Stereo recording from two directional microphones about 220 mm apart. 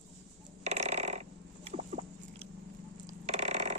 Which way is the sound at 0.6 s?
30° right (ahead or behind).